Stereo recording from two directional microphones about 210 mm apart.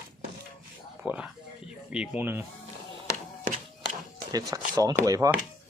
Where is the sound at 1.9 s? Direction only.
5° right (ahead or behind).